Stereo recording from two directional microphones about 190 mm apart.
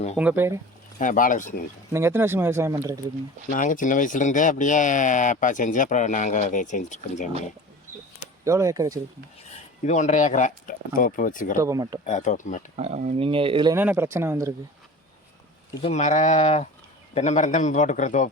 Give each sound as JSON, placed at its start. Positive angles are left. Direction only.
{"t": 0.2, "sound": "speech", "side_deg": -10}
{"t": 0.9, "sound": "speech", "side_deg": 45}
{"t": 1.9, "sound": "speech", "side_deg": -15}
{"t": 3.5, "sound": "speech", "side_deg": 45}
{"t": 8.4, "sound": "speech", "side_deg": -15}
{"t": 9.8, "sound": "speech", "side_deg": 40}
{"t": 11.5, "sound": "speech", "side_deg": -15}
{"t": 12.0, "sound": "speech", "side_deg": 40}
{"t": 12.7, "sound": "speech", "side_deg": -35}
{"t": 13.7, "sound": "speech", "side_deg": -10}
{"t": 15.8, "sound": "speech", "side_deg": 35}